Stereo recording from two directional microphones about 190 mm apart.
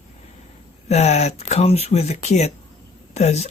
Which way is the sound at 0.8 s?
35° left (ahead or behind).